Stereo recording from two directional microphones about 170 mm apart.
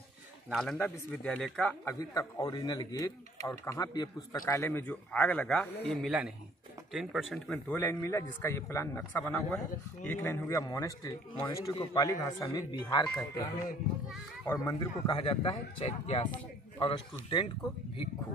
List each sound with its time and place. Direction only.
0.5 s a man's voice: centre (ahead or behind)
2.0 s a man's voice: 20° left (ahead or behind); by 7.6 s centre (ahead or behind)
7.7 s a man's voice: 15° left (ahead or behind)
14.5 s a man's voice: 20° left (ahead or behind)